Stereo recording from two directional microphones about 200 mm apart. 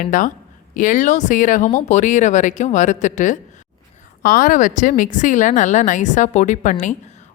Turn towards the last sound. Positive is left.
turn(degrees=35)  # may be behind; listen again after turning